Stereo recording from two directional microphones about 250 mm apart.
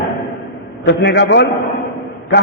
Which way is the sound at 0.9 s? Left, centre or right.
Left.